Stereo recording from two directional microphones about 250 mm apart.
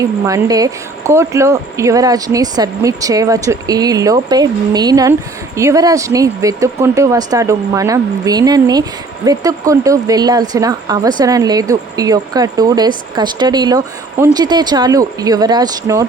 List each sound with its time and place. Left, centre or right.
0.0 s speech: centre